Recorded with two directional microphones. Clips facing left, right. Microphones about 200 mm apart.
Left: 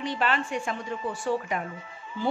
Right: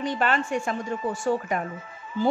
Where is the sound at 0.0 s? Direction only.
45° right (ahead or behind).